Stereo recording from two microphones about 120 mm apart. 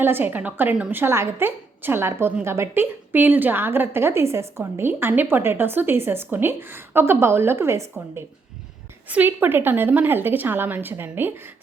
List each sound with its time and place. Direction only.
0.0 s a woman's voice: 15° right (ahead or behind)